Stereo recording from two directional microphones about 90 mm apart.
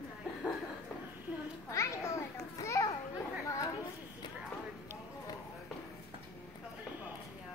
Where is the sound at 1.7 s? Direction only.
35° left (ahead or behind).